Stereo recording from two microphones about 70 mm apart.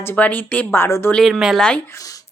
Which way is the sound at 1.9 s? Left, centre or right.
Left.